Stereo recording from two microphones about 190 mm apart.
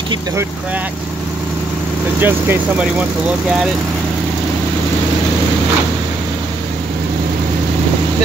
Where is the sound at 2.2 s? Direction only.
10° right (ahead or behind).